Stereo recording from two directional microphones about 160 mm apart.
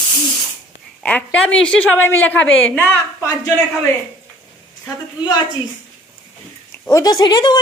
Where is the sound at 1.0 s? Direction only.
10° left (ahead or behind).